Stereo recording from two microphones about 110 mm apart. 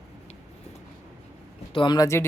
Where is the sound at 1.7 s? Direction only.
40° left (ahead or behind).